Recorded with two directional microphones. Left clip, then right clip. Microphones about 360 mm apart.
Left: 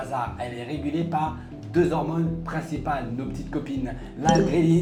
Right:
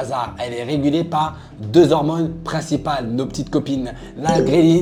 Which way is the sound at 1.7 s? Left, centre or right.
Right.